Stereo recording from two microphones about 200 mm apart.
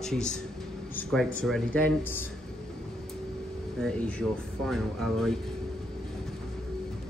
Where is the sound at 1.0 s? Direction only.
5° left (ahead or behind).